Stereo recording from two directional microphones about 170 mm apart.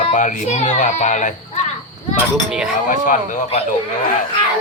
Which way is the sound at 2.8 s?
50° left (ahead or behind).